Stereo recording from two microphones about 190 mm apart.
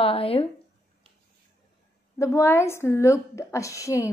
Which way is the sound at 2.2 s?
15° left (ahead or behind).